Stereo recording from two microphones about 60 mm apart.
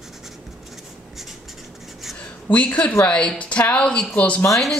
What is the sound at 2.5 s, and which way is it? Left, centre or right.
Speech, left.